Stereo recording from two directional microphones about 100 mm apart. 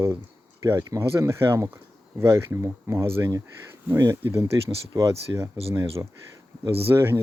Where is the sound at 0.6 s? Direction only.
30° right (ahead or behind).